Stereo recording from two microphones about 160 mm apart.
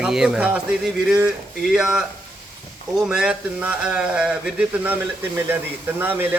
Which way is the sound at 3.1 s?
5° right (ahead or behind).